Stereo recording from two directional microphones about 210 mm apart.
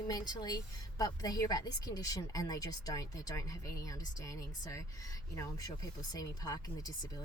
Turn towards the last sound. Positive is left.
turn(degrees=15)  # may be behind; listen again after turning